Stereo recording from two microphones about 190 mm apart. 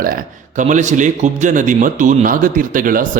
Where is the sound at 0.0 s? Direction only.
50° right (ahead or behind).